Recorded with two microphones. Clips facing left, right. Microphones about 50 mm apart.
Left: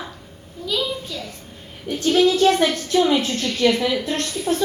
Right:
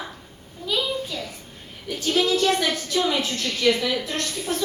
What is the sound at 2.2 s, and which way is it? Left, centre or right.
A woman's voice, left.